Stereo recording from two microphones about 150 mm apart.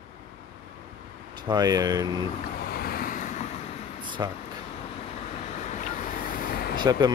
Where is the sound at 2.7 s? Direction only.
85° left; by 3.6 s 50° left (ahead or behind).